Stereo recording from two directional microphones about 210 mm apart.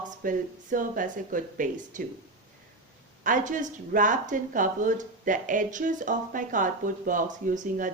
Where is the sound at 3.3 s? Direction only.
40° right (ahead or behind).